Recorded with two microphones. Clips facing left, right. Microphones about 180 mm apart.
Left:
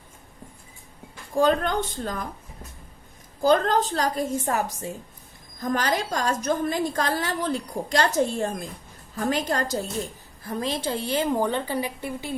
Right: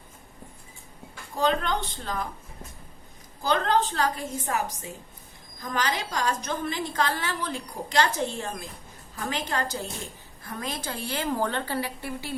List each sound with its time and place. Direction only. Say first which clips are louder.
1.4 s a woman's voice: left 4 dB; 45° left (ahead or behind)
3.4 s a woman's voice: left 4 dB; 40° left (ahead or behind)
5.6 s a woman's voice: left 4 dB; 45° left (ahead or behind)
10.4 s a woman's voice: left 6 dB; 30° left (ahead or behind)